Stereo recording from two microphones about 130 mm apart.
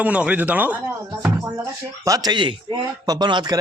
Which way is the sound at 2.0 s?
30° right (ahead or behind).